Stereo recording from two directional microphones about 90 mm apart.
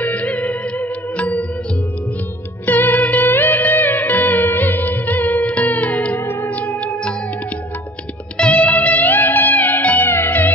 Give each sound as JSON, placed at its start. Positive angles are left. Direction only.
{"t": 0.0, "sound": "music", "side_deg": 15}
{"t": 2.6, "sound": "music", "side_deg": 20}
{"t": 8.4, "sound": "music", "side_deg": 15}